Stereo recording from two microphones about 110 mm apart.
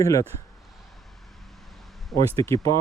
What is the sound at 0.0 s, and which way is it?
Speech, 30° left (ahead or behind).